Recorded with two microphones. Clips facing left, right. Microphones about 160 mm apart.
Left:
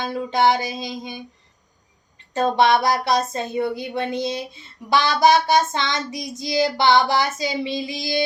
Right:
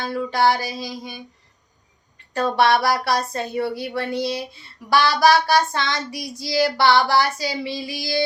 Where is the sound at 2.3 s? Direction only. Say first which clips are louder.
Left 1 dB; 20° left (ahead or behind).